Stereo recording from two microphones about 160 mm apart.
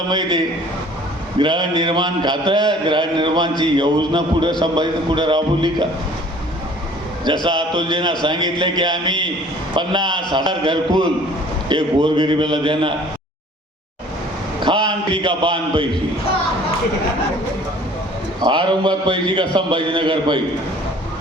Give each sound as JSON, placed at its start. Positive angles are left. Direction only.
{"t": 0.1, "sound": "a man's voice", "side_deg": -30}
{"t": 7.4, "sound": "a man's voice", "side_deg": -30}
{"t": 14.6, "sound": "a man's voice", "side_deg": -30}
{"t": 18.4, "sound": "a man's voice", "side_deg": -30}